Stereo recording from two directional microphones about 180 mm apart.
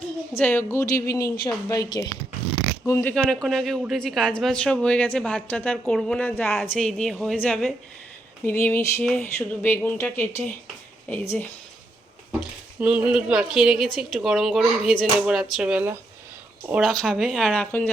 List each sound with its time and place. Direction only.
0.3 s speech: 10° left (ahead or behind)
12.4 s speech: 5° right (ahead or behind); by 17.9 s 10° left (ahead or behind)